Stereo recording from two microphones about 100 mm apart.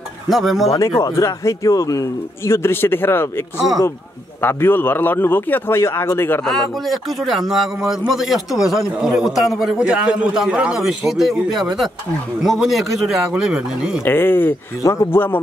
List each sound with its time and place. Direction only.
0.3 s speech: centre (ahead or behind)
0.7 s speech: 30° left (ahead or behind)
6.4 s speech: centre (ahead or behind)
14.0 s speech: 20° left (ahead or behind)
14.8 s speech: 30° left (ahead or behind)